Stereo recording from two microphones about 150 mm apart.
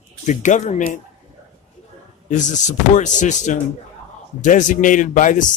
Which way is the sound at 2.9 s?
55° left (ahead or behind).